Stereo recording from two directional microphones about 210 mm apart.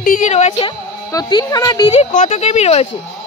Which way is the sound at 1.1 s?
20° left (ahead or behind).